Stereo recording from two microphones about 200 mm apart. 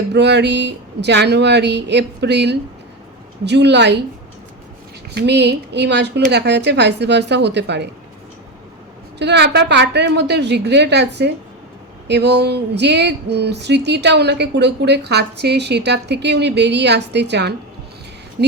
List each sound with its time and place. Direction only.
0.1 s speech: 60° right (ahead or behind)
5.1 s speech: 60° right (ahead or behind)
9.1 s speech: 60° right (ahead or behind)